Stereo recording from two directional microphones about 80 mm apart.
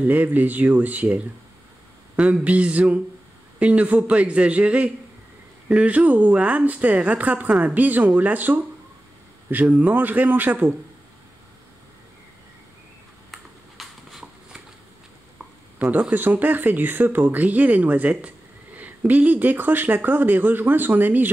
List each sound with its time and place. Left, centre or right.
0.0 s a man's voice: right
13.8 s a sound: centre
15.8 s speech: right